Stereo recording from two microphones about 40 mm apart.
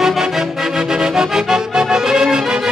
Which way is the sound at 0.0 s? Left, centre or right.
Centre.